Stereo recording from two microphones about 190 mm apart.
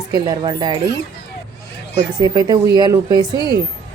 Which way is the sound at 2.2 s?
20° right (ahead or behind).